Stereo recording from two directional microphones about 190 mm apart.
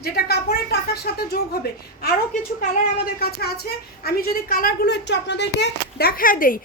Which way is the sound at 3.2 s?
55° left (ahead or behind).